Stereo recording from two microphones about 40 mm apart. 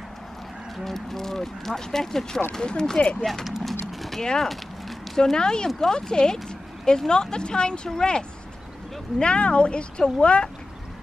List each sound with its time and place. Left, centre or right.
0.8 s speech: centre
2.6 s speech: left
3.8 s clip-clop: centre
4.4 s a sound: centre
5.2 s speech: centre